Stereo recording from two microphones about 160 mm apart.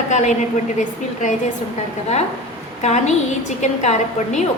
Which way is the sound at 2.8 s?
45° left (ahead or behind).